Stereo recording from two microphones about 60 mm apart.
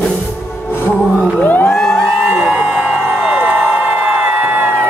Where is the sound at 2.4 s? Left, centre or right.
Centre.